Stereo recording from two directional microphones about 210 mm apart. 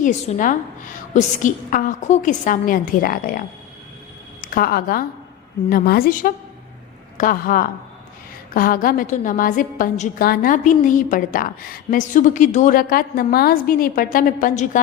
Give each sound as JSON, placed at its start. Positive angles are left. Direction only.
{"t": 0.0, "sound": "a woman's voice", "side_deg": 35}